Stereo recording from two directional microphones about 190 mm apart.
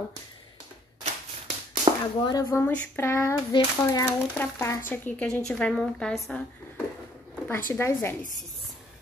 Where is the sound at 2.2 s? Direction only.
20° left (ahead or behind).